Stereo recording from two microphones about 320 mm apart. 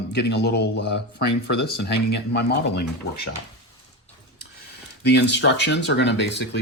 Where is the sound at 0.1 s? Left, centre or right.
Left.